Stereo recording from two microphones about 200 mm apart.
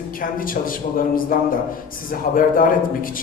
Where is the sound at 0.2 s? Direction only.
45° left (ahead or behind).